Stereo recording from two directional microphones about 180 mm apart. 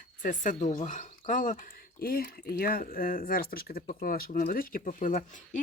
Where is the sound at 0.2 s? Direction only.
45° left (ahead or behind).